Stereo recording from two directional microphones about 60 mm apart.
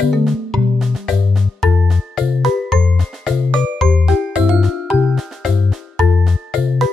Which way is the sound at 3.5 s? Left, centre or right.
Centre.